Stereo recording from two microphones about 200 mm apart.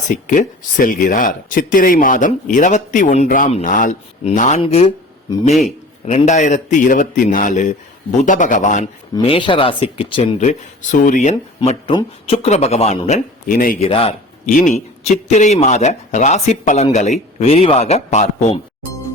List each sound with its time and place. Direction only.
0.3 s speech: 40° left (ahead or behind)
9.1 s speech: 25° left (ahead or behind); by 13.7 s 45° left (ahead or behind)
13.8 s a man's voice: 30° left (ahead or behind)